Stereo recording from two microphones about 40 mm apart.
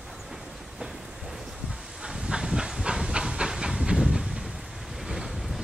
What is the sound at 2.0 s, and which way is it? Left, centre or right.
Hiss, centre.